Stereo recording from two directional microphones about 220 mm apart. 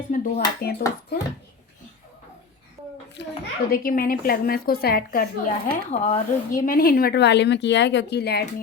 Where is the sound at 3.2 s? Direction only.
50° left (ahead or behind).